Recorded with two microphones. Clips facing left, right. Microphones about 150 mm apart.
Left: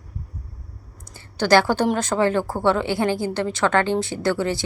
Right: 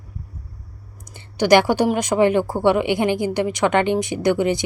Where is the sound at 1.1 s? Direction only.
15° right (ahead or behind).